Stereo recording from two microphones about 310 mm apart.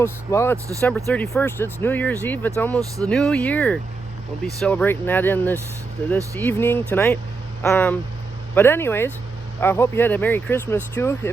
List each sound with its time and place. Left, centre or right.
0.0 s speech: centre